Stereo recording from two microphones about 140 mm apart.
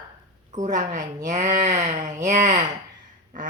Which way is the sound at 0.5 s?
60° right (ahead or behind).